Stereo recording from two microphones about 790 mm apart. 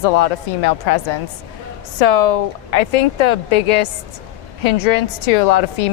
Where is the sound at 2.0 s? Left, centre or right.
Left.